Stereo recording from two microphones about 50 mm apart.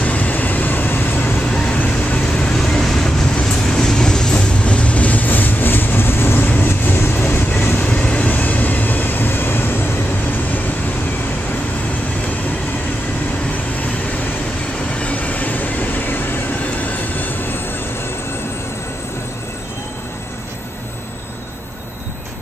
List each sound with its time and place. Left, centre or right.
0.0 s vehicle: left
1.8 s vehicle: left
2.5 s vehicle: centre
3.4 s train: centre; by 7.7 s left
7.7 s vehicle: left
14.9 s vehicle: left
16.8 s train: left